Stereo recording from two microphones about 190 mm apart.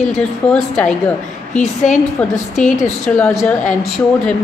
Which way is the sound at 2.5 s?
40° left (ahead or behind).